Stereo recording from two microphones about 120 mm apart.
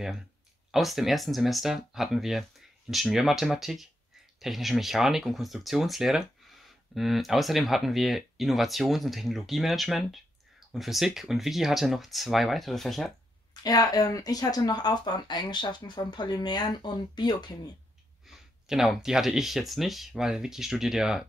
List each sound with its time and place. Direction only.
0.7 s speech: centre (ahead or behind)
13.5 s speech: 35° left (ahead or behind)
18.2 s speech: 5° right (ahead or behind)